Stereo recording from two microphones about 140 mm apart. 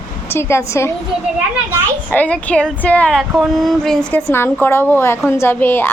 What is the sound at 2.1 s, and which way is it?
A woman's voice, 10° left (ahead or behind).